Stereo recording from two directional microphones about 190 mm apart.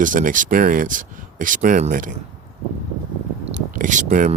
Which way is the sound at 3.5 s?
40° right (ahead or behind).